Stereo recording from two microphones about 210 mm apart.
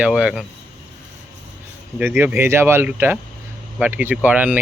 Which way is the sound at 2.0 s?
10° right (ahead or behind).